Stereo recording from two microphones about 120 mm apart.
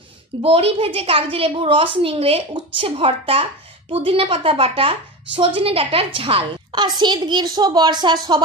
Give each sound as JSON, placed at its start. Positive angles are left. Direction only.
{"t": 0.4, "sound": "a woman's voice", "side_deg": -55}